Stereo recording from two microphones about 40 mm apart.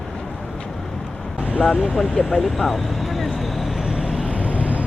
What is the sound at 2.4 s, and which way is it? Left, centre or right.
Vehicle, centre.